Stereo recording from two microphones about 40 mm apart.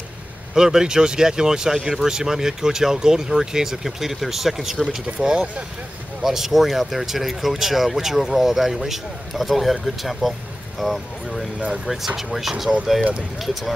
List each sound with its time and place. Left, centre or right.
0.6 s speech: centre
5.0 s speech: right
6.2 s speech: centre